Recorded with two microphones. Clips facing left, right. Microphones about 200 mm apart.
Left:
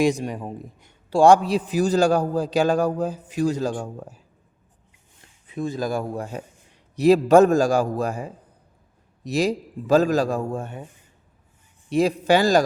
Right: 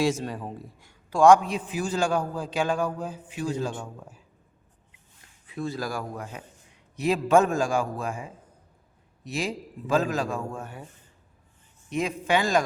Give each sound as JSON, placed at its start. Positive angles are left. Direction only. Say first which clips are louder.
{"t": 0.0, "sound": "speech", "louder": "left 4 dB", "side_deg": 15}
{"t": 1.1, "sound": "a man's voice", "louder": "left 3 dB", "side_deg": 30}
{"t": 5.5, "sound": "a man's voice", "louder": "left 5 dB", "side_deg": 20}
{"t": 11.9, "sound": "a man's voice", "louder": "left 7 dB", "side_deg": 35}